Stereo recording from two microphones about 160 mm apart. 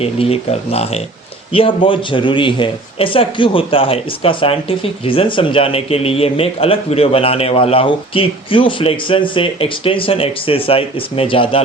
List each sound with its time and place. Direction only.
0.0 s speech: 40° left (ahead or behind)